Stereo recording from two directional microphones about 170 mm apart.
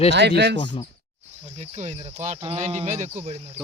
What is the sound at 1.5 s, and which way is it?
Speech, 40° right (ahead or behind).